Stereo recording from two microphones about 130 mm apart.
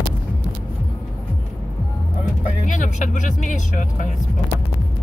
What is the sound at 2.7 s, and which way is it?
Speech, 75° left (ahead or behind).